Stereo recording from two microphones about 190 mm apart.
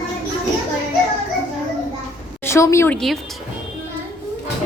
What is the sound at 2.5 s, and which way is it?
Speech, 15° left (ahead or behind).